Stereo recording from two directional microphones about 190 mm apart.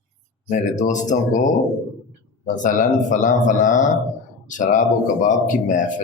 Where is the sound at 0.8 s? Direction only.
40° left (ahead or behind).